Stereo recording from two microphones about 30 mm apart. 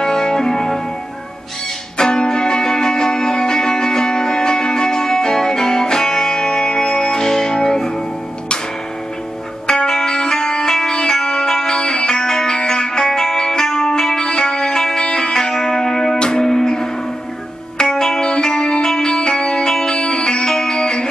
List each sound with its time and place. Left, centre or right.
0.0 s music: centre
2.0 s music: left
9.8 s music: centre